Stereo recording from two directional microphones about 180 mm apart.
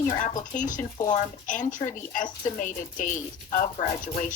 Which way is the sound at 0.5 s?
45° left (ahead or behind).